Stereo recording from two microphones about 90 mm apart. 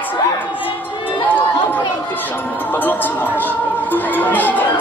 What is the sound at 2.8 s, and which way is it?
Speech, 20° left (ahead or behind).